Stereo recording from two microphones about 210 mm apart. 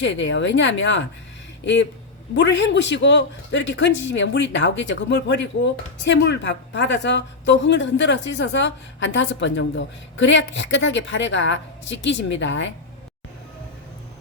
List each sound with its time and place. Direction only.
0.0 s a woman's voice: 60° left (ahead or behind)
2.3 s a woman's voice: 55° left (ahead or behind)